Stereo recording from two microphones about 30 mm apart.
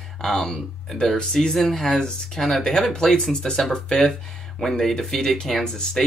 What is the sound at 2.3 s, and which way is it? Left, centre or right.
Speech, centre.